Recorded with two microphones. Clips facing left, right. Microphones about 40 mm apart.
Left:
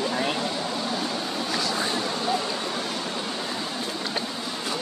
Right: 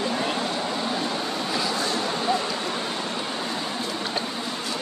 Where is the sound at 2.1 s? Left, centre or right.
Centre.